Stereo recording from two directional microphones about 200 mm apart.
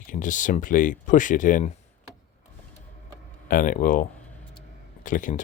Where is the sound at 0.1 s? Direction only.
40° left (ahead or behind).